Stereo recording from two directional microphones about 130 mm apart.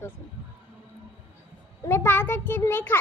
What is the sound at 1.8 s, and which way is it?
A woman's voice, 20° left (ahead or behind).